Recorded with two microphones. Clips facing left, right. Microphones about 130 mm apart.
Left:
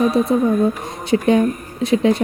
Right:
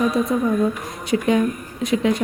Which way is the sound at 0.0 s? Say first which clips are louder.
Left 4 dB; 35° left (ahead or behind).